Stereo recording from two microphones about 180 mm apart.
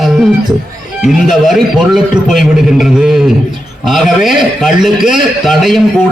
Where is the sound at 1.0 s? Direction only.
Centre (ahead or behind).